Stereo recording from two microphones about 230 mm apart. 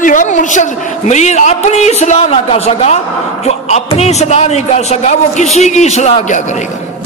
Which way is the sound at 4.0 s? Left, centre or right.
Left.